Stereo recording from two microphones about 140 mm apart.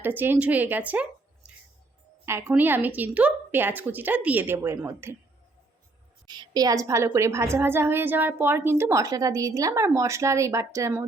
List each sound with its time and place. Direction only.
0.0 s a woman's voice: 15° right (ahead or behind)
2.5 s a woman's voice: 15° right (ahead or behind)
6.2 s a woman's voice: 30° right (ahead or behind)